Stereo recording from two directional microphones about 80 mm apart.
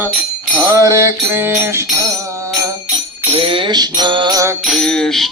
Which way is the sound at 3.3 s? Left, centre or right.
Right.